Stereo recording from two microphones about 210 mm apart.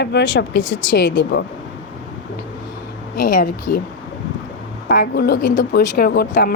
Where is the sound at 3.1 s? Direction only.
45° left (ahead or behind).